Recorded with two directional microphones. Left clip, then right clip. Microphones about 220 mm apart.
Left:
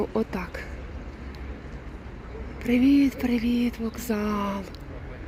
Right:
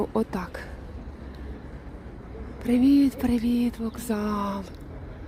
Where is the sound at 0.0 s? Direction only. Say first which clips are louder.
Even; 5° right (ahead or behind).